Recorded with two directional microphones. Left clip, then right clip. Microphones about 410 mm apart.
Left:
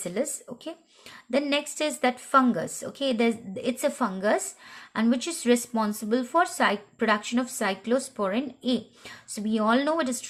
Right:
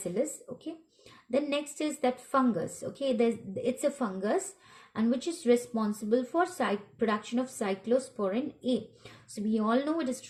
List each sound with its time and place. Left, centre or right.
1.3 s a woman's voice: centre